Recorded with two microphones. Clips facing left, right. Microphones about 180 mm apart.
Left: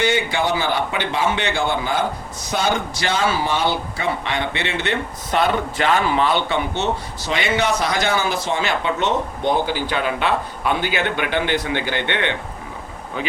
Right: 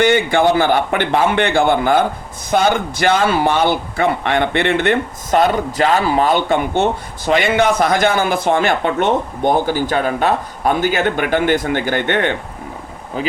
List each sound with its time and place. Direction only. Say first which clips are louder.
0.0 s a man's voice: right 7 dB; 55° right (ahead or behind)